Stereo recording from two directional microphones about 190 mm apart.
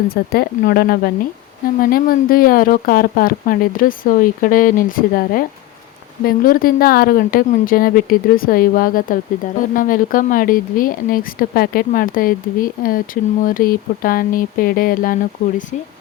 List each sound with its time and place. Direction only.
0.1 s speech: 55° left (ahead or behind)